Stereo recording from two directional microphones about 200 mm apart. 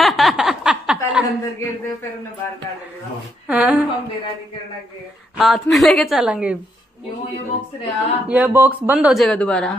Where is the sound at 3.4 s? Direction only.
5° right (ahead or behind).